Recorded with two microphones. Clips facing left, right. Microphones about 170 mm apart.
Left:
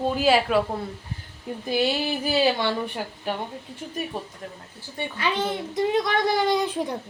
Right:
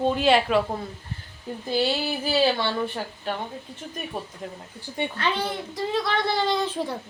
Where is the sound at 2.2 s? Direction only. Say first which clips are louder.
Even; 15° left (ahead or behind).